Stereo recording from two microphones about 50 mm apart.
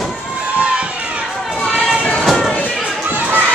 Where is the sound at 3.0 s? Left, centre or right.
Right.